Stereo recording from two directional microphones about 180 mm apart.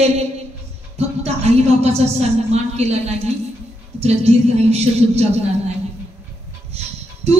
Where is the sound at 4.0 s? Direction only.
35° right (ahead or behind).